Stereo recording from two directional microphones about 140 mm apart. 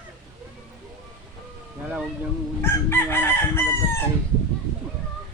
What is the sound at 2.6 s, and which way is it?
Chicken, 15° left (ahead or behind).